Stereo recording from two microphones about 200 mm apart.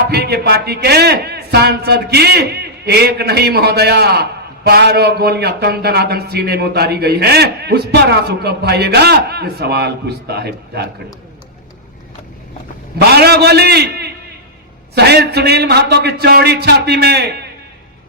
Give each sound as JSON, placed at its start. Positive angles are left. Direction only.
{"t": 0.1, "sound": "a man's voice", "side_deg": -55}
{"t": 13.0, "sound": "a man's voice", "side_deg": -55}